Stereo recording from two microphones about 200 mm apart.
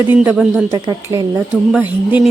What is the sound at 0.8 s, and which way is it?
Speech, 15° right (ahead or behind).